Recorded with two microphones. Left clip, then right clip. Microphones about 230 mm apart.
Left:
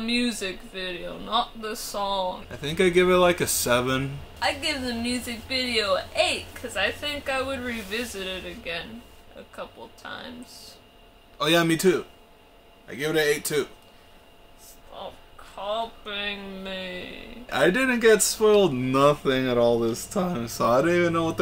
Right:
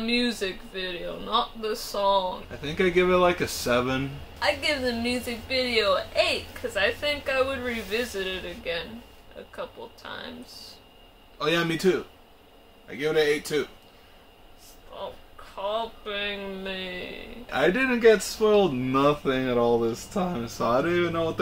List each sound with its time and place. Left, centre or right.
0.0 s a woman's voice: centre
2.6 s speech: left
4.4 s a woman's voice: centre
11.3 s speech: left
14.9 s a sound: centre
15.7 s a woman's voice: centre
17.5 s speech: left